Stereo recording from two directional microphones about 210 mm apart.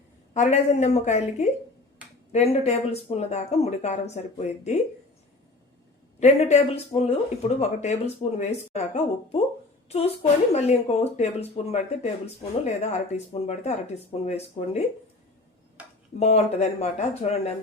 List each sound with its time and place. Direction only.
0.3 s speech: 30° left (ahead or behind)
6.1 s speech: 30° left (ahead or behind)
16.2 s speech: 30° left (ahead or behind)